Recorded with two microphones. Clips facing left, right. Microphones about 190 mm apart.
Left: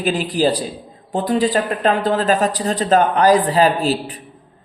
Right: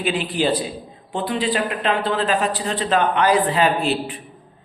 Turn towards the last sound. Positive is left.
turn(degrees=35)  # may be behind; listen again after turning